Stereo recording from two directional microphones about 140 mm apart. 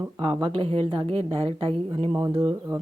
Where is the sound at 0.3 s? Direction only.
35° right (ahead or behind).